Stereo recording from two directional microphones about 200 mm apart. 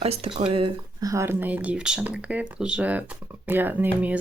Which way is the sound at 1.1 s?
10° right (ahead or behind).